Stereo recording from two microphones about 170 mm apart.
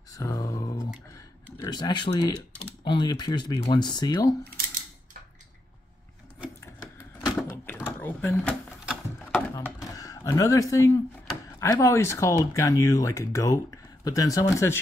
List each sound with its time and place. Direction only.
0.1 s a sound: 20° left (ahead or behind)
2.6 s speech: 30° left (ahead or behind)
6.6 s vehicle: 15° left (ahead or behind)
7.5 s door: 10° left (ahead or behind)
8.0 s drawer open or close: 10° left (ahead or behind)
9.8 s a sound: 20° left (ahead or behind)
11.6 s speech: 15° left (ahead or behind)